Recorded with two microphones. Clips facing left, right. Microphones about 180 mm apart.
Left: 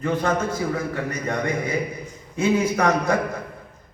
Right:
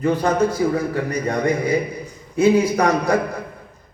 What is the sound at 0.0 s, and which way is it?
A man's voice, 35° right (ahead or behind).